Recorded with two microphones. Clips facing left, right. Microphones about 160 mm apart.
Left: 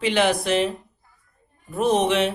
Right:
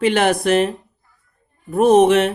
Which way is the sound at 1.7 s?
55° right (ahead or behind).